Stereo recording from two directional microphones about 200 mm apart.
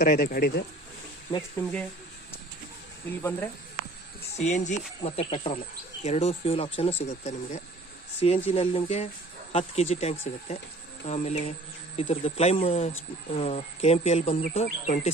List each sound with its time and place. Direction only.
0.0 s speech: 45° left (ahead or behind)
1.3 s speech: 25° left (ahead or behind)
3.1 s speech: 10° left (ahead or behind)
4.4 s speech: 35° left (ahead or behind)